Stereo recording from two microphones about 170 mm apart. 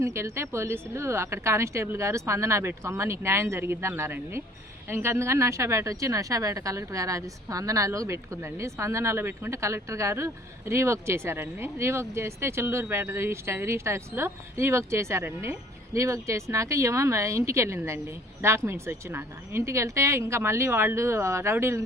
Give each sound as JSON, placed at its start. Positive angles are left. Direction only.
{"t": 0.0, "sound": "a woman's voice", "side_deg": -15}